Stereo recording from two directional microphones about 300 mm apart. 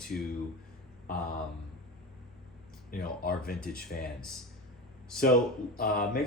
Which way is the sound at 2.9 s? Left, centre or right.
Left.